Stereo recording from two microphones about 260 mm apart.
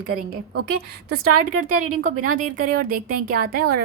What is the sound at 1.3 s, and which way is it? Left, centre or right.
Speech, right.